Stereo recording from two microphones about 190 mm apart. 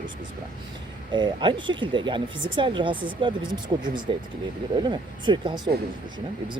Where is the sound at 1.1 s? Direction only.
25° right (ahead or behind).